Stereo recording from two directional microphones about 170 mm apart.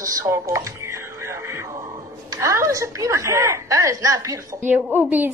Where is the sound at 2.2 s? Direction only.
20° right (ahead or behind).